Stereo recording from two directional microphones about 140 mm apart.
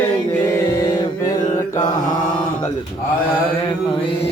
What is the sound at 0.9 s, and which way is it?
Mantra, 25° left (ahead or behind).